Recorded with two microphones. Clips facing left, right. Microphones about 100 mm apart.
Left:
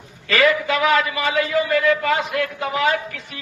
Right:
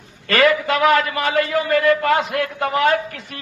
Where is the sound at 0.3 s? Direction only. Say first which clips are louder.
Right 2 dB; 50° right (ahead or behind).